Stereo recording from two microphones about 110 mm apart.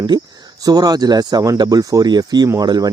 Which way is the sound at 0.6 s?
35° right (ahead or behind).